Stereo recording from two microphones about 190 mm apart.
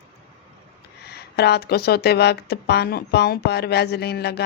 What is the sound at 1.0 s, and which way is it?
Speech, 60° left (ahead or behind).